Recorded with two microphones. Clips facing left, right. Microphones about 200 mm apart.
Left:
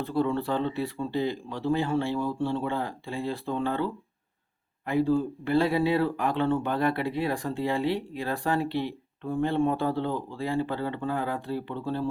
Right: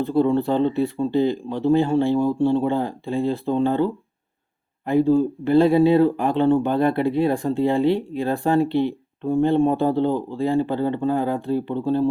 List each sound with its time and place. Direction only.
0.0 s speech: 25° right (ahead or behind)